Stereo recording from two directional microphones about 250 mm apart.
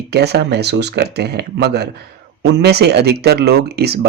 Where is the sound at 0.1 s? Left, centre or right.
Right.